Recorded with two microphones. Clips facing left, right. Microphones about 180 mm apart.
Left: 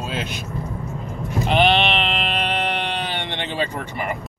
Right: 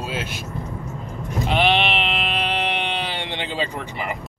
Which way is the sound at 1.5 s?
5° right (ahead or behind).